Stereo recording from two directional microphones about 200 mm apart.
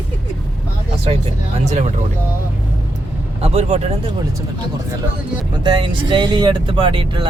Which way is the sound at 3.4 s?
35° right (ahead or behind).